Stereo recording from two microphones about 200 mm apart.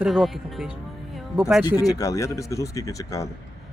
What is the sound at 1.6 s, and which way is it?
Speech, 20° left (ahead or behind).